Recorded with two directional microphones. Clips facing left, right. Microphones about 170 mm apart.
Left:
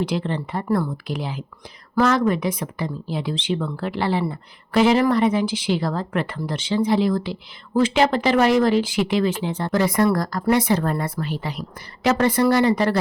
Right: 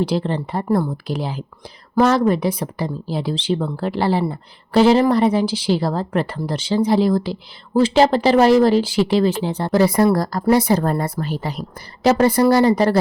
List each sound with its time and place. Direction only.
0.0 s speech: 35° right (ahead or behind)